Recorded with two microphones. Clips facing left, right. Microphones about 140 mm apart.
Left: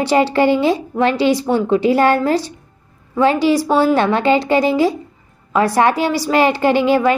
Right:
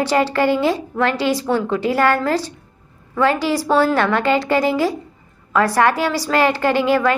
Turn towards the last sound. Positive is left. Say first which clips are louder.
# left 3 dB
turn(degrees=20)  # may be behind; listen again after turning